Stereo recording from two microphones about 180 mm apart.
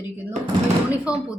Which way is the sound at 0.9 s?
5° right (ahead or behind).